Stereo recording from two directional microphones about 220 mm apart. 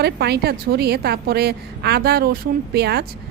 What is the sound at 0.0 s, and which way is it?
A woman's voice, 50° right (ahead or behind).